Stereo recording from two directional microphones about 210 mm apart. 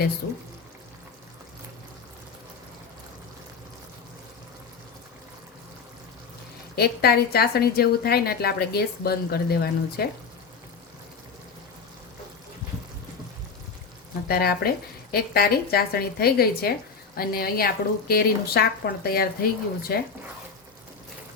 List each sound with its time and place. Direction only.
6.7 s a woman's voice: 50° left (ahead or behind)
14.3 s a woman's voice: 45° left (ahead or behind)